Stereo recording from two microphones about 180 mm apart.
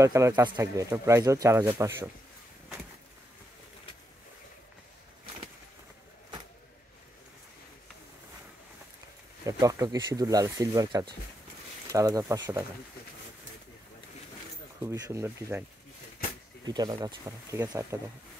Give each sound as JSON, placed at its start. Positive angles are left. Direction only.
{"t": 0.0, "sound": "speech", "side_deg": -15}
{"t": 9.5, "sound": "speech", "side_deg": -20}
{"t": 14.8, "sound": "speech", "side_deg": -15}
{"t": 16.6, "sound": "speech", "side_deg": -20}